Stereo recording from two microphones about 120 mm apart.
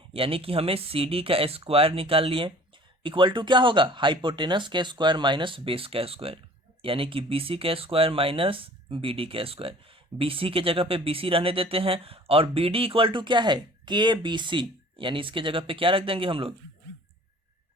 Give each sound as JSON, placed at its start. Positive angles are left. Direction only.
{"t": 0.1, "sound": "speech", "side_deg": -50}